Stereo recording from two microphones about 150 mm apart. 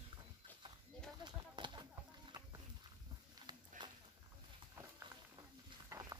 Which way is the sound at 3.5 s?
30° right (ahead or behind).